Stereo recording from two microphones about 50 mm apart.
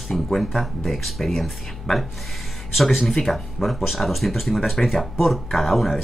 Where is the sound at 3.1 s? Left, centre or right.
Centre.